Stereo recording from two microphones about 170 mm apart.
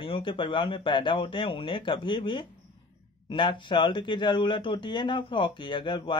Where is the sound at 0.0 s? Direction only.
30° left (ahead or behind).